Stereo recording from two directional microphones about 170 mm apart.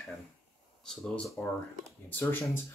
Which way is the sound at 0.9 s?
Centre (ahead or behind).